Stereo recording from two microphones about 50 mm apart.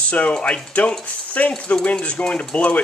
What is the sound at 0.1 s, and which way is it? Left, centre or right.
Speech, left.